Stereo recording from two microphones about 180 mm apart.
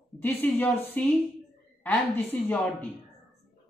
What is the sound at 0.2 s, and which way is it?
Speech, 10° left (ahead or behind).